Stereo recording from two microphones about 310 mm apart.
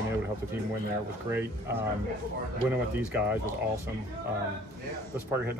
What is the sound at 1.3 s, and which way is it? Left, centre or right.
Speech, centre.